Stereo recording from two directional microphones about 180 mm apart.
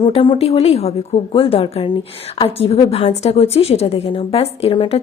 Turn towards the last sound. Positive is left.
turn(degrees=35)  # may be behind; listen again after turning